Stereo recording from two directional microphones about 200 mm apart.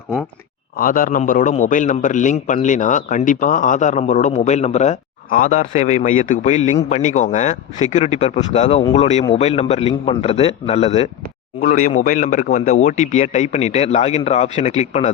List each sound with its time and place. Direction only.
0.8 s a man's voice: 45° left (ahead or behind)
11.6 s a man's voice: 45° left (ahead or behind)